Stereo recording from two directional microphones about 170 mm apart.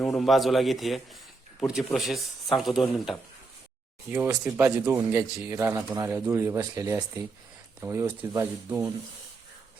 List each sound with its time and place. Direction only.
0.0 s speech: centre (ahead or behind); by 8.9 s 15° right (ahead or behind)